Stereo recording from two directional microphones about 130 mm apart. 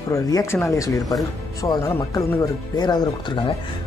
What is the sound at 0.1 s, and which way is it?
Speech, 25° left (ahead or behind).